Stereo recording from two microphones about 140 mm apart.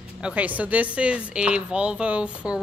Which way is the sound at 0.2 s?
10° right (ahead or behind).